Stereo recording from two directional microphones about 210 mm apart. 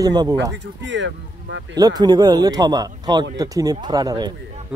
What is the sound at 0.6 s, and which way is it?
Speech, 60° right (ahead or behind).